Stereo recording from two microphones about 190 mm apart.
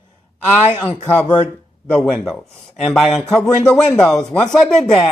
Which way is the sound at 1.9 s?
5° left (ahead or behind).